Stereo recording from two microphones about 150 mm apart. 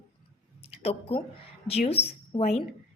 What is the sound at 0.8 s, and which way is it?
A woman's voice, 35° left (ahead or behind).